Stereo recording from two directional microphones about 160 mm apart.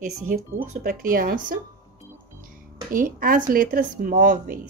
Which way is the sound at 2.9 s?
60° right (ahead or behind).